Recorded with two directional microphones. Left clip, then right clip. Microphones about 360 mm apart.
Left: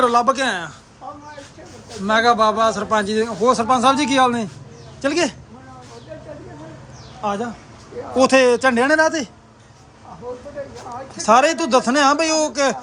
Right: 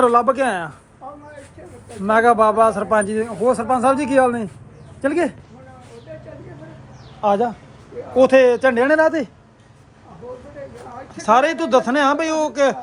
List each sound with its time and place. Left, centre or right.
0.0 s a man's voice: centre
2.0 s a man's voice: centre
7.2 s a man's voice: centre
11.2 s a man's voice: centre